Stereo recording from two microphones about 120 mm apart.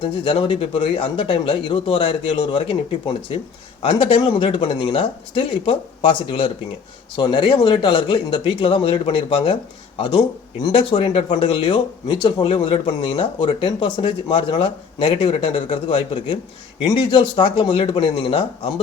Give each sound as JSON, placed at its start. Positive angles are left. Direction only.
{"t": 0.0, "sound": "speech", "side_deg": 45}